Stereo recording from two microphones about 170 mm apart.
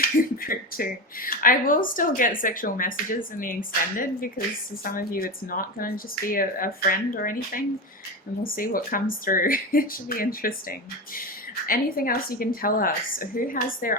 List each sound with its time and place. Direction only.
0.0 s speech: 60° left (ahead or behind)